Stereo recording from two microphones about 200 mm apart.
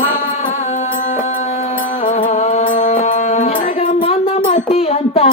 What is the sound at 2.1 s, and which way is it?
Music, 40° left (ahead or behind).